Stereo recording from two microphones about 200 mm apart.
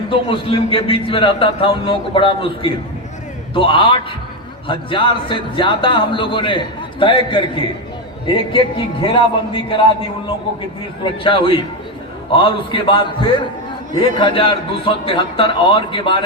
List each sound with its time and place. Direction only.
0.1 s a man's voice: 25° left (ahead or behind)
11.0 s a man's voice: 25° left (ahead or behind)